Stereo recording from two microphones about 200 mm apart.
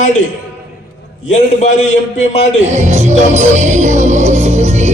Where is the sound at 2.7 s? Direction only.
35° right (ahead or behind).